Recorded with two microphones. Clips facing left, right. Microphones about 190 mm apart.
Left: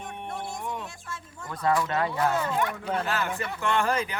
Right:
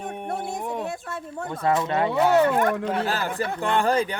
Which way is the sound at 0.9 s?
65° right (ahead or behind).